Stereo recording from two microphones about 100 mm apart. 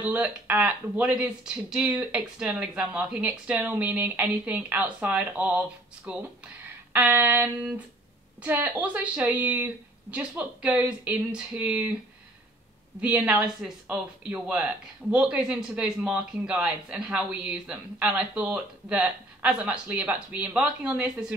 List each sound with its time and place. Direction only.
0.0 s speech: 15° right (ahead or behind)
13.0 s speech: 15° right (ahead or behind)